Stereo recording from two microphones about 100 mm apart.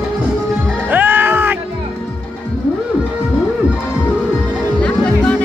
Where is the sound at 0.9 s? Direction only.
20° right (ahead or behind).